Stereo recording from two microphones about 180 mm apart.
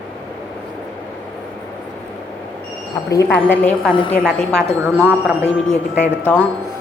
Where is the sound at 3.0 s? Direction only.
15° left (ahead or behind).